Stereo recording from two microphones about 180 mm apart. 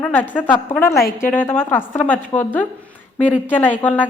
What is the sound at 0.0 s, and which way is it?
A woman's voice, 10° left (ahead or behind).